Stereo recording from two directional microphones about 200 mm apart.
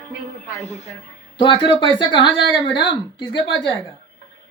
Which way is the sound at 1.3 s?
25° left (ahead or behind).